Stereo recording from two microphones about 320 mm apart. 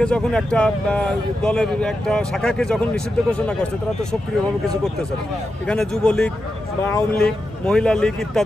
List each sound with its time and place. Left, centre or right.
0.0 s a man's voice: centre
5.7 s a man's voice: centre